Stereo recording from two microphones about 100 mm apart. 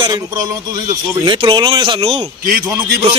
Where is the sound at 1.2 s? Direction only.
55° right (ahead or behind).